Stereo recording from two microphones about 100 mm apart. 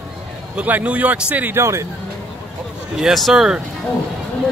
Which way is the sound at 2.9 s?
5° right (ahead or behind).